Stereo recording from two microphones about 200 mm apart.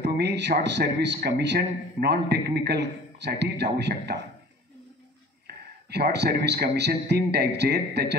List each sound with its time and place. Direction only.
0.0 s speech: 60° right (ahead or behind)
5.9 s speech: 55° right (ahead or behind)